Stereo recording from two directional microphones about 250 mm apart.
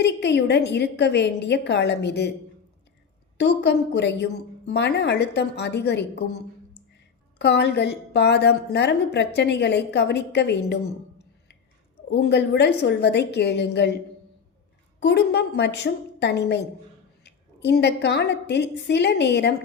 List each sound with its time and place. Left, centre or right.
0.0 s a woman's voice: left
3.3 s a woman's voice: left
12.1 s a woman's voice: left
15.0 s a woman's voice: left